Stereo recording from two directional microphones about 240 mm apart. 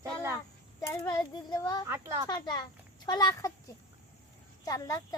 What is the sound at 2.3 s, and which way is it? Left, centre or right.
A child's voice, centre.